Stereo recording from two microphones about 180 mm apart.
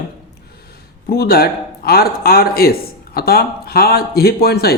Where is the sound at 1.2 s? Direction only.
60° left (ahead or behind).